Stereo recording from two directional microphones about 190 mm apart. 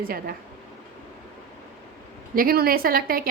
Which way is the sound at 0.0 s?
50° right (ahead or behind).